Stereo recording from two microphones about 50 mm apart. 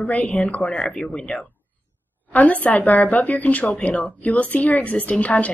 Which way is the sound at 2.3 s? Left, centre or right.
Left.